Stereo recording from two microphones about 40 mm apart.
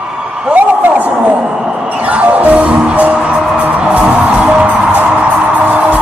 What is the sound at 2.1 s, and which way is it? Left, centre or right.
Music, right.